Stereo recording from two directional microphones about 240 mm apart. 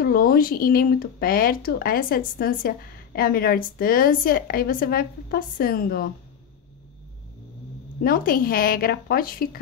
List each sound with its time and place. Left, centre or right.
0.0 s speech: left
8.0 s speech: left